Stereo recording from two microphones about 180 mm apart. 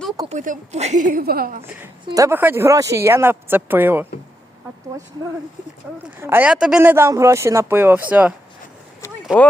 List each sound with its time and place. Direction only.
0.3 s a woman's voice: 45° right (ahead or behind)
2.0 s speech: 20° right (ahead or behind)
6.1 s speech: 15° right (ahead or behind)
9.3 s speech: 5° right (ahead or behind)